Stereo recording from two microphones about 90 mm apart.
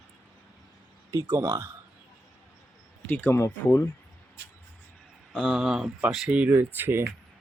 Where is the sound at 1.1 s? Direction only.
30° right (ahead or behind).